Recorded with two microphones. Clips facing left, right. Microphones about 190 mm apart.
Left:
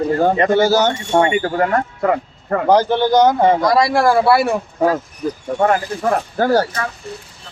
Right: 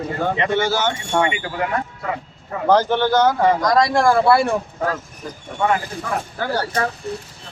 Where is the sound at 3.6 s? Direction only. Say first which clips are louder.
Left 2 dB; 10° left (ahead or behind).